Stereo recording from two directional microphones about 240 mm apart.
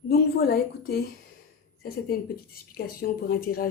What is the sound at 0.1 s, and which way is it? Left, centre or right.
A woman's voice, left.